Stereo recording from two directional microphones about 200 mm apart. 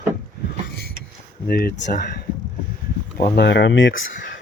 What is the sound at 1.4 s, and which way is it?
Speech, 50° left (ahead or behind).